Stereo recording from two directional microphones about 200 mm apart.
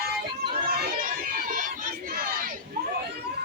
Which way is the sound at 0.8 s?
45° right (ahead or behind).